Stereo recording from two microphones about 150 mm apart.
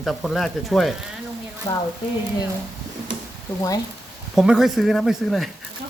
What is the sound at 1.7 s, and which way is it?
Speech, 20° left (ahead or behind).